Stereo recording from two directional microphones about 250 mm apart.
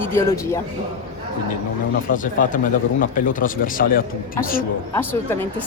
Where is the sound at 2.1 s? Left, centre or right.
Left.